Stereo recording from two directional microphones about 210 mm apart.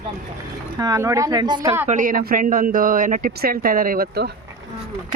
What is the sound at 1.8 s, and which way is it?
Speech, 40° right (ahead or behind).